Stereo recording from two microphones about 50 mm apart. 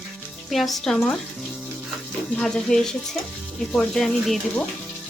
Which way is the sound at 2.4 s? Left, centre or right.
Centre.